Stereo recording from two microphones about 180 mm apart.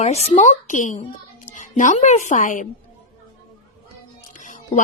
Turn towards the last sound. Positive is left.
turn(degrees=45)  # may be behind; listen again after turning